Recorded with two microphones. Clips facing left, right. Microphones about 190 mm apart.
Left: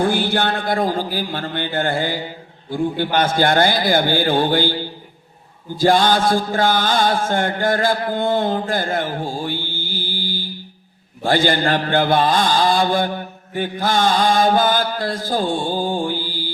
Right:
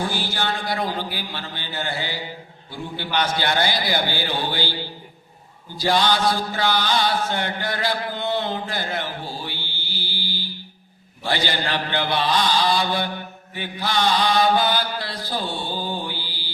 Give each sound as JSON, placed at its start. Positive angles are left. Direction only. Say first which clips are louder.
{"t": 0.0, "sound": "a man's voice", "louder": "left 8 dB", "side_deg": 55}
{"t": 5.8, "sound": "a man's voice", "louder": "left 5 dB", "side_deg": 50}